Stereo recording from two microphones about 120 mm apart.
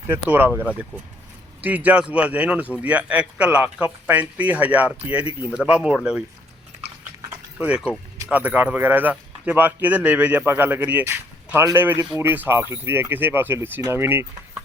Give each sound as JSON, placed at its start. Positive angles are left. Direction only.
{"t": 0.1, "sound": "speech", "side_deg": -15}
{"t": 7.3, "sound": "a sound", "side_deg": -10}
{"t": 8.3, "sound": "speech", "side_deg": -10}